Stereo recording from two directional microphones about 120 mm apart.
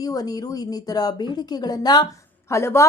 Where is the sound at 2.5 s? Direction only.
25° left (ahead or behind).